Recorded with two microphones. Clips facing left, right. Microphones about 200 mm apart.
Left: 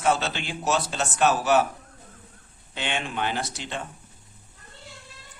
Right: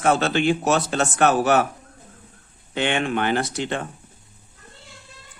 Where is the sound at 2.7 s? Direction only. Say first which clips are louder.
Right 8 dB; 60° right (ahead or behind).